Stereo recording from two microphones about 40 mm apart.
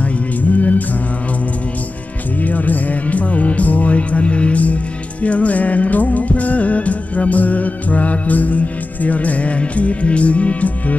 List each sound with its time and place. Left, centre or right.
0.4 s music: left
2.4 s music: left